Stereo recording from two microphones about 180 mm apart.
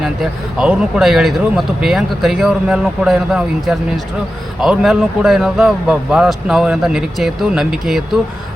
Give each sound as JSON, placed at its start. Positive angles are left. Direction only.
{"t": 0.0, "sound": "speech", "side_deg": -5}